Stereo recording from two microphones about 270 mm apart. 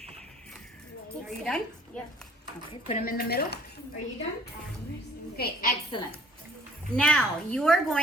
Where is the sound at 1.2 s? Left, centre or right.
Centre.